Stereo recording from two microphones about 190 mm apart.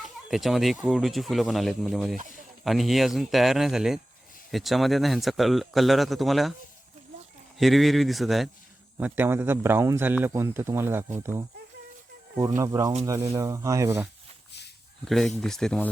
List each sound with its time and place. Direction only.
0.0 s speech: centre (ahead or behind)
7.6 s speech: centre (ahead or behind)
15.0 s speech: centre (ahead or behind)